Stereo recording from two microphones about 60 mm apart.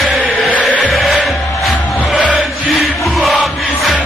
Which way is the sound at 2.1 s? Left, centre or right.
Centre.